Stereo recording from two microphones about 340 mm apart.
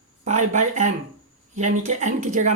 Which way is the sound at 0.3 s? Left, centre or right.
Right.